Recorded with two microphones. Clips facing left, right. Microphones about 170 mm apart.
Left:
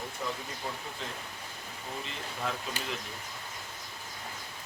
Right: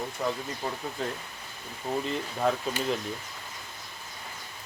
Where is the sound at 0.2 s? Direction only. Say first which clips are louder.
Right 6 dB; 65° right (ahead or behind).